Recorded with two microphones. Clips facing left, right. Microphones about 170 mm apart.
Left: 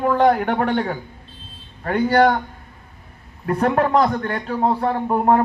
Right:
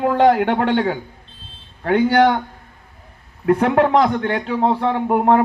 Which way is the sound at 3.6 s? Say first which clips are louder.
Even; 70° right (ahead or behind).